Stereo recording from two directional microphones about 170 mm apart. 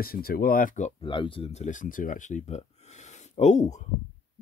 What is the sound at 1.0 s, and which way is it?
Speech, 30° left (ahead or behind).